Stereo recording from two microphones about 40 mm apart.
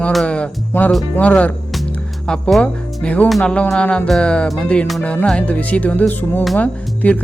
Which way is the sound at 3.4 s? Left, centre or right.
Left.